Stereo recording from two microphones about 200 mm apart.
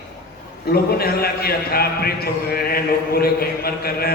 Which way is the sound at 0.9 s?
50° left (ahead or behind).